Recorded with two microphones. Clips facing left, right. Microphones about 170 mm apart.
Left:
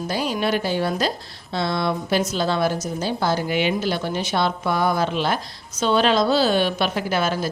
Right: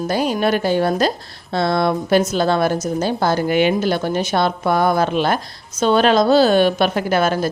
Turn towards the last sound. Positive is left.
turn(degrees=-50)  # may be behind; listen again after turning